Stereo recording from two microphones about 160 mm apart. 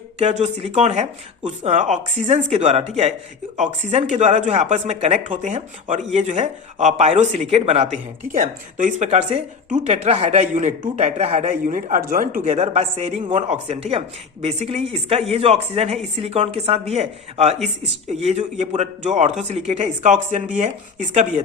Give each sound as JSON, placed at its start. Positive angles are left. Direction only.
{"t": 0.2, "sound": "speech", "side_deg": -40}
{"t": 8.3, "sound": "speech", "side_deg": -55}
{"t": 12.5, "sound": "speech", "side_deg": -45}